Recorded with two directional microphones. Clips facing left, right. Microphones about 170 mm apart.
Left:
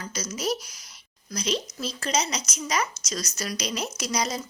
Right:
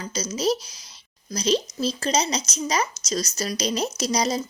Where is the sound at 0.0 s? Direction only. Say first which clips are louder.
Right 5 dB; 25° right (ahead or behind).